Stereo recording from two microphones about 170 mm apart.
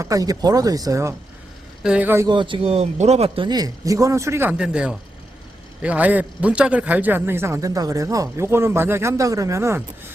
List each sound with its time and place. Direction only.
0.0 s speech: 20° right (ahead or behind)
1.8 s a man's voice: 5° right (ahead or behind)
2.3 s a man's voice: 30° right (ahead or behind)